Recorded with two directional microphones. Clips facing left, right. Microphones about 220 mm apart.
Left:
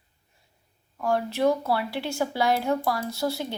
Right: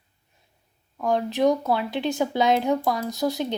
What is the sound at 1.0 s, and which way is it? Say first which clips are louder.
Speech: right 2 dB; 20° right (ahead or behind).